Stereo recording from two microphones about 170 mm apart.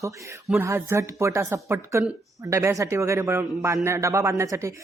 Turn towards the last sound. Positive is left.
turn(degrees=-15)  # may be behind; listen again after turning